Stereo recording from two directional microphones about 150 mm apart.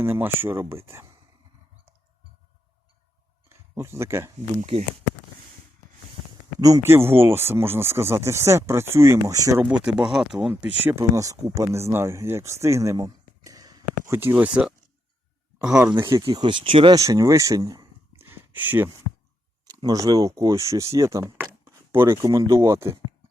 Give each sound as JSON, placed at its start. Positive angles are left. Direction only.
{"t": 0.0, "sound": "speech", "side_deg": -15}
{"t": 3.5, "sound": "speech", "side_deg": -20}
{"t": 4.6, "sound": "speech", "side_deg": -45}
{"t": 6.6, "sound": "speech", "side_deg": -25}
{"t": 9.6, "sound": "speech", "side_deg": -5}
{"t": 10.5, "sound": "speech", "side_deg": -15}
{"t": 16.0, "sound": "speech", "side_deg": -25}
{"t": 16.9, "sound": "speech", "side_deg": -25}
{"t": 18.3, "sound": "a sound", "side_deg": -10}
{"t": 19.8, "sound": "speech", "side_deg": -25}
{"t": 21.6, "sound": "a sound", "side_deg": -15}
{"t": 22.2, "sound": "speech", "side_deg": -20}